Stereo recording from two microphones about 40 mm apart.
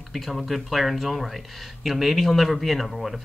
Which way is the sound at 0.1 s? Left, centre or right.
Centre.